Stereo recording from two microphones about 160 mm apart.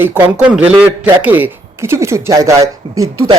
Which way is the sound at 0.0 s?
10° right (ahead or behind).